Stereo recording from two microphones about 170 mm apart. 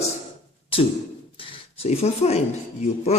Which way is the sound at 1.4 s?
35° left (ahead or behind).